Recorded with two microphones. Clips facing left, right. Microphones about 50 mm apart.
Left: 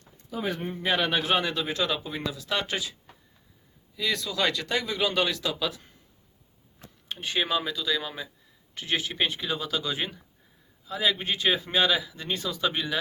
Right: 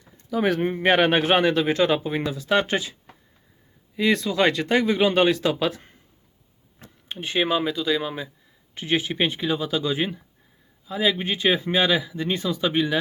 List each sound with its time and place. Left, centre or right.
0.3 s speech: right
0.7 s speech: right
3.9 s speech: right
6.7 s speech: right